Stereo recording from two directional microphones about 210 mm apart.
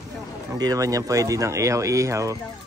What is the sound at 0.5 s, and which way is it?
Speech, 15° right (ahead or behind).